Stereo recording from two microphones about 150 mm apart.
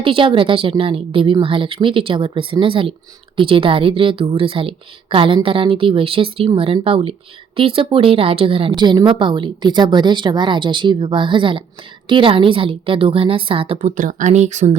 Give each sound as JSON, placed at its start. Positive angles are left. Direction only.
{"t": 0.0, "sound": "a woman's voice", "side_deg": -35}
{"t": 13.9, "sound": "speech", "side_deg": -60}